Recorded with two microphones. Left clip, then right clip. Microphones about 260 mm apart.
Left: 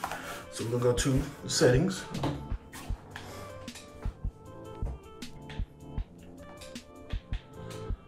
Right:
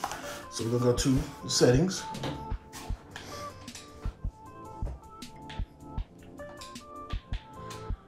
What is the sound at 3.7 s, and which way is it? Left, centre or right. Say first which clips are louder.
Music: even; centre.